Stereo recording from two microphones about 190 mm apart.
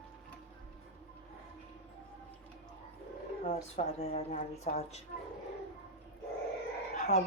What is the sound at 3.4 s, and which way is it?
Speech, 35° left (ahead or behind).